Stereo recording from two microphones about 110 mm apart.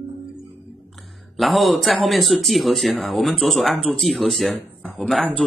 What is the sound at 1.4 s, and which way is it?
Speech, centre (ahead or behind).